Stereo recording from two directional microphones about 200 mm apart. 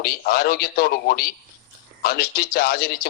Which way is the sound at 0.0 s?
50° left (ahead or behind).